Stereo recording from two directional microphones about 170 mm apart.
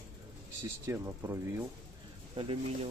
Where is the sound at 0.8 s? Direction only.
15° right (ahead or behind).